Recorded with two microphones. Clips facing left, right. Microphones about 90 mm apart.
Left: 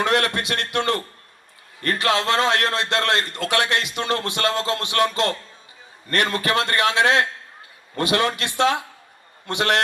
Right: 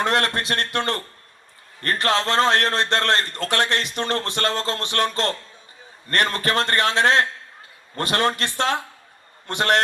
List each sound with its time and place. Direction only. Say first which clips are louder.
0.0 s a man's voice: left 1 dB; 35° right (ahead or behind)